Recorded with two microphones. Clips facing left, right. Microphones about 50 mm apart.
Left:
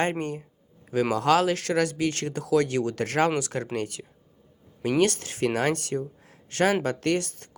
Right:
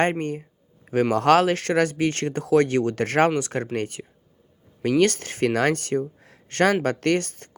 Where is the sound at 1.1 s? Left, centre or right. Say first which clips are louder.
Right 4 dB; right.